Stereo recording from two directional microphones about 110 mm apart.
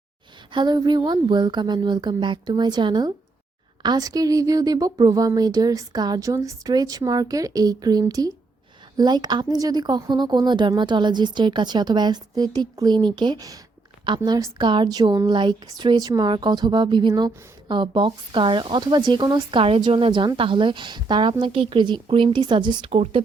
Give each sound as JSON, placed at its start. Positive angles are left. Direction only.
{"t": 0.5, "sound": "a woman's voice", "side_deg": -40}
{"t": 22.9, "sound": "speech", "side_deg": -65}